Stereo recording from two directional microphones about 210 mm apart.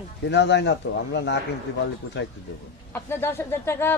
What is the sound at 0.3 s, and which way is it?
Speech, 55° left (ahead or behind).